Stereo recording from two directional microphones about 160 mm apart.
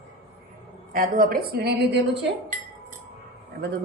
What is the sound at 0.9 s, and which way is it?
A woman's voice, 60° right (ahead or behind).